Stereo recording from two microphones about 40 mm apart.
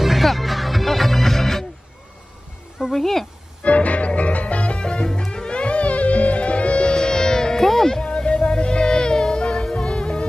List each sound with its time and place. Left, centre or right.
0.0 s music: centre
2.9 s speech: centre
3.6 s music: left; by 8.0 s centre
8.0 s music: left